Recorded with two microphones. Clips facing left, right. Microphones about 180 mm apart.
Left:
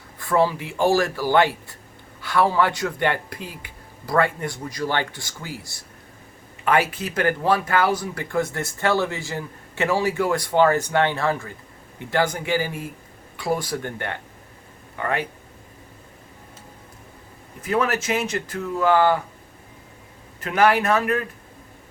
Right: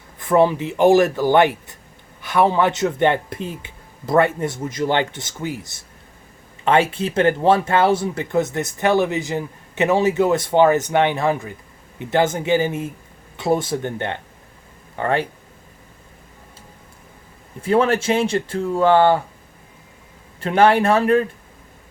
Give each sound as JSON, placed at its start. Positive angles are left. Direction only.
{"t": 0.2, "sound": "speech", "side_deg": -20}
{"t": 17.6, "sound": "speech", "side_deg": -30}
{"t": 20.4, "sound": "speech", "side_deg": -30}